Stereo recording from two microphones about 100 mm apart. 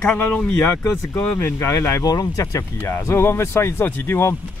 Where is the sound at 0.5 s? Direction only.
25° left (ahead or behind).